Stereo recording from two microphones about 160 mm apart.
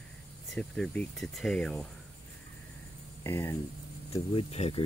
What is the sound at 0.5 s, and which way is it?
Speech, 5° left (ahead or behind).